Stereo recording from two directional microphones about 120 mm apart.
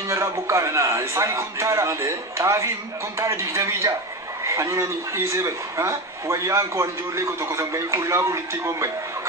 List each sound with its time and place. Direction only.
0.1 s a man's voice: 25° right (ahead or behind)